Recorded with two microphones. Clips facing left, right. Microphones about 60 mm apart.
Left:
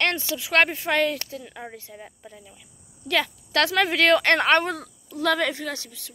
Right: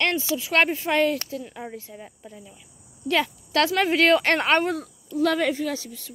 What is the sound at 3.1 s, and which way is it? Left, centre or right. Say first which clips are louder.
Speech: right 1 dB; left.